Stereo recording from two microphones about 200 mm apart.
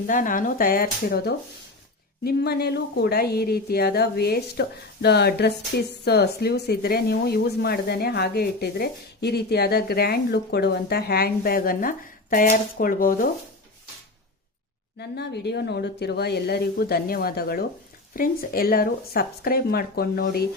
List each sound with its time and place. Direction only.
0.1 s speech: 40° left (ahead or behind)
14.9 s speech: 55° left (ahead or behind)